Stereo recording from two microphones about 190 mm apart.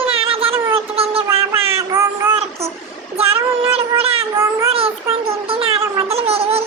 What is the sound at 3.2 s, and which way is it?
Child singing, 30° right (ahead or behind).